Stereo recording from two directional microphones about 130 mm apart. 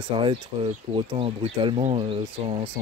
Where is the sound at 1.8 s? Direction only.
50° right (ahead or behind).